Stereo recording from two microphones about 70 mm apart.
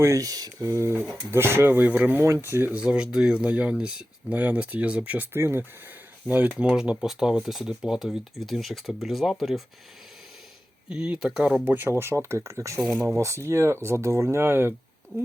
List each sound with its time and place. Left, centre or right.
0.0 s speech: right
0.6 s speech: right
6.2 s speech: right; by 9.6 s centre
10.8 s speech: centre
11.6 s speech: right